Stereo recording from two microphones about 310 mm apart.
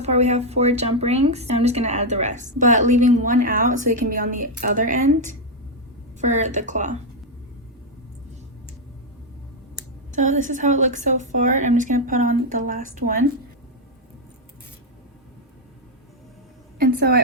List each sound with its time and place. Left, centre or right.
0.0 s a woman's voice: right
9.7 s a woman's voice: right
16.7 s a woman's voice: right